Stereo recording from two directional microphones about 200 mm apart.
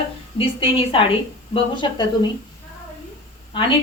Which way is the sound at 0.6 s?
25° left (ahead or behind).